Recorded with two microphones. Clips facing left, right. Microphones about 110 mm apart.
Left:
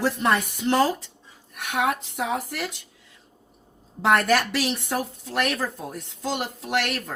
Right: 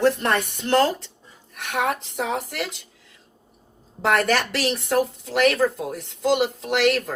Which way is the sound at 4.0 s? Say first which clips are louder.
Even; centre (ahead or behind).